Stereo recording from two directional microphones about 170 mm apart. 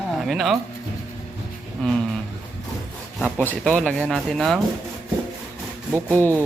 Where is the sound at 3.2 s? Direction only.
10° right (ahead or behind).